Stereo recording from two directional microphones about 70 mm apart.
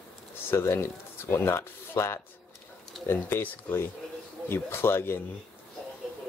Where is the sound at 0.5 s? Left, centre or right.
Left.